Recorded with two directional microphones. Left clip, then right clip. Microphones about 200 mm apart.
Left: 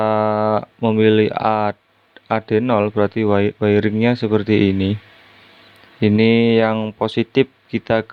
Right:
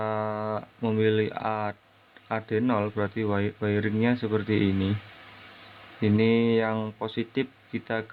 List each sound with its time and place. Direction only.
0.0 s a sound: 55° left (ahead or behind)
2.2 s speech: 55° left (ahead or behind)
6.0 s speech: 55° left (ahead or behind)